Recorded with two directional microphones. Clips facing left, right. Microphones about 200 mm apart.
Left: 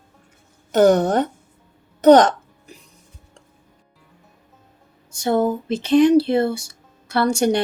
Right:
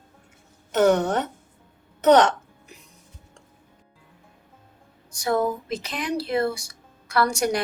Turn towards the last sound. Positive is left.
turn(degrees=25)  # may be behind; listen again after turning